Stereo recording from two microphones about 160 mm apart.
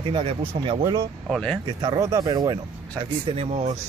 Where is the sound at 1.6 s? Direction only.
25° right (ahead or behind).